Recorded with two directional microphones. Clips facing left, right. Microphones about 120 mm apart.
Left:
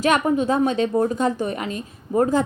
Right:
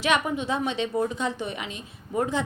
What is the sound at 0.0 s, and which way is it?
A woman's voice, 45° left (ahead or behind).